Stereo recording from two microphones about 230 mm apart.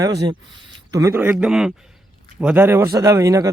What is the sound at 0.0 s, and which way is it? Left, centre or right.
A man's voice, centre.